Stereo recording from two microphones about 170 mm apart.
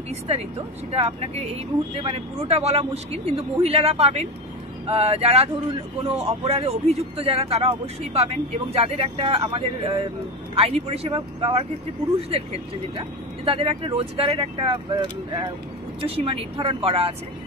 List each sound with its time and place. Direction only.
0.3 s speech: 35° right (ahead or behind)
13.5 s speech: 30° right (ahead or behind)